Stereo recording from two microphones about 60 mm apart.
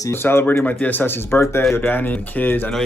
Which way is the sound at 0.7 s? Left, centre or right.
Left.